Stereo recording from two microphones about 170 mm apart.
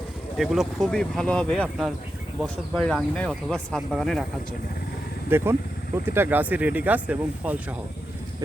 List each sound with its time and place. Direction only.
0.3 s speech: centre (ahead or behind)
5.3 s speech: 15° right (ahead or behind)